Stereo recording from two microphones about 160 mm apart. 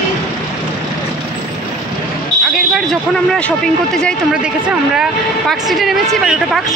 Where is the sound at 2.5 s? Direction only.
5° left (ahead or behind).